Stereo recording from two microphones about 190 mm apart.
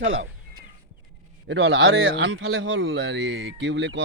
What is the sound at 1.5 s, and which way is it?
A man's voice, 75° right (ahead or behind).